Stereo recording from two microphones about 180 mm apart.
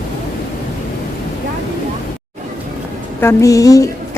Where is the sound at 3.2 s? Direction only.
15° left (ahead or behind).